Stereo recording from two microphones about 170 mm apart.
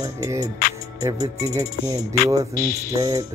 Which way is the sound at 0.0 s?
20° right (ahead or behind).